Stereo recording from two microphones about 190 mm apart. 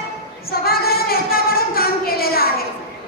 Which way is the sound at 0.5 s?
55° left (ahead or behind).